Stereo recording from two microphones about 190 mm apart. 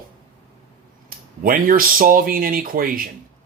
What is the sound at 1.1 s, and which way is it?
Speech, 50° right (ahead or behind).